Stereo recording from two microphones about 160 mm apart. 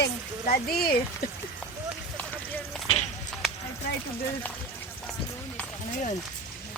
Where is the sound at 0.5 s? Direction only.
70° left (ahead or behind).